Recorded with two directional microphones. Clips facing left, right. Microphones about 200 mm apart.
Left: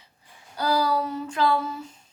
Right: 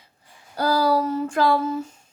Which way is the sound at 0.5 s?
45° right (ahead or behind).